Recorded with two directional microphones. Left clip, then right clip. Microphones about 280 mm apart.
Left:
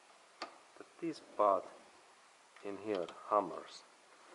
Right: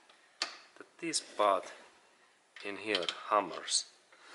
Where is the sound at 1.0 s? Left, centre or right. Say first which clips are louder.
Right 2 dB; centre.